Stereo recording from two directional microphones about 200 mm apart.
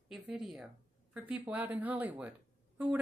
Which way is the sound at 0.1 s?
Centre (ahead or behind).